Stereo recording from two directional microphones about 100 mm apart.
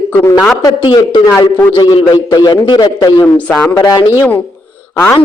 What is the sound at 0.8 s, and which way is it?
A man's voice, 55° left (ahead or behind).